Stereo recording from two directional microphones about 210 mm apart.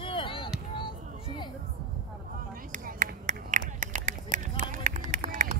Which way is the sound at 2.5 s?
40° right (ahead or behind).